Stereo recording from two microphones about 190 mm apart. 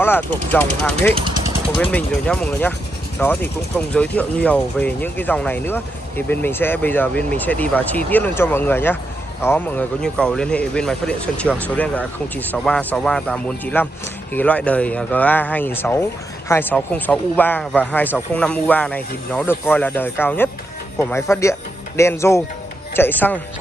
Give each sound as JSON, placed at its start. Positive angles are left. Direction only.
{"t": 0.0, "sound": "speech", "side_deg": 10}
{"t": 1.1, "sound": "speech", "side_deg": -25}
{"t": 1.8, "sound": "speech", "side_deg": 5}